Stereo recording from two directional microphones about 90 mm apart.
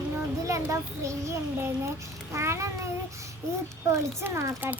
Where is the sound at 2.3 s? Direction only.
30° right (ahead or behind).